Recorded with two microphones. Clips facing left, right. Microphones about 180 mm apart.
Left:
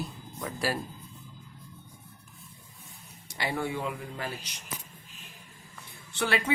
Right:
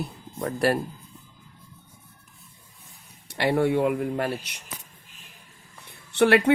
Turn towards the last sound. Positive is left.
turn(degrees=-65)  # may be behind; listen again after turning